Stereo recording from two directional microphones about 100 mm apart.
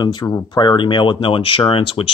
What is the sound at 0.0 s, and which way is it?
Speech, 50° left (ahead or behind).